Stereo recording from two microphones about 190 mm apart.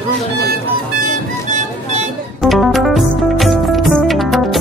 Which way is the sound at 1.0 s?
40° right (ahead or behind).